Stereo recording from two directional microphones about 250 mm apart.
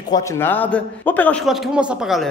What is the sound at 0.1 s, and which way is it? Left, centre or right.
A man's voice, centre.